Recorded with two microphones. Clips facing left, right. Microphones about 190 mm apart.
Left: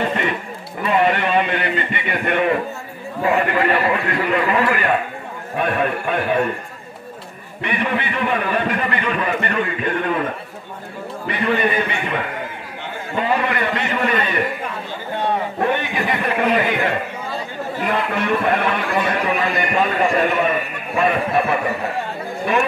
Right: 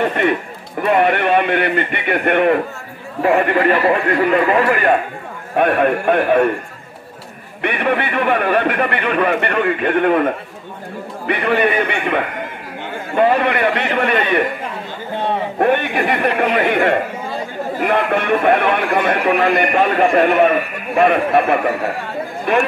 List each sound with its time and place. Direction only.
0.0 s a man's voice: 55° right (ahead or behind)
5.6 s speech: 55° right (ahead or behind)
7.6 s speech: 60° right (ahead or behind)
15.6 s speech: 60° right (ahead or behind)